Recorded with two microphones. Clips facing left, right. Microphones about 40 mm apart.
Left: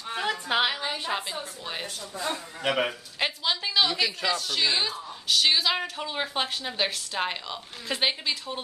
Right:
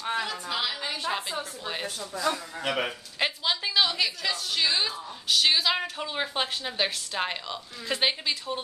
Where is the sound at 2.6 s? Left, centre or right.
Centre.